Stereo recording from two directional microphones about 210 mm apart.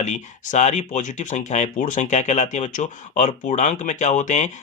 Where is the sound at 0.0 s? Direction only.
35° left (ahead or behind).